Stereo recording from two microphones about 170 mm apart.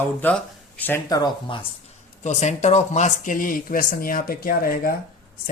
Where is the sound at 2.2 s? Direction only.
45° left (ahead or behind); by 5.0 s 60° left (ahead or behind).